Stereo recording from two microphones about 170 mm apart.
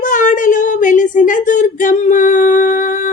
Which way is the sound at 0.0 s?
50° left (ahead or behind).